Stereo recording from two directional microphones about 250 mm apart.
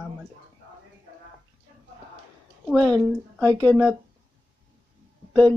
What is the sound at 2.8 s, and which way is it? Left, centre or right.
Speech, centre.